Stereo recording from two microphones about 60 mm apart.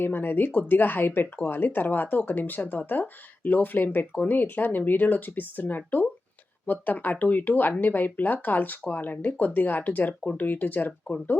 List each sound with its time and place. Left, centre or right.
0.0 s speech: left